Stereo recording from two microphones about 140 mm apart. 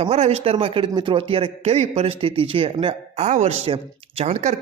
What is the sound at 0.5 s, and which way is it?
Speech, 35° right (ahead or behind).